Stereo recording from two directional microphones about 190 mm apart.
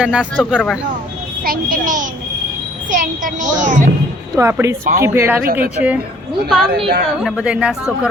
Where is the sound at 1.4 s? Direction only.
45° right (ahead or behind).